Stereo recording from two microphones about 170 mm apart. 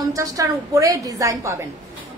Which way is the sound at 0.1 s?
20° right (ahead or behind).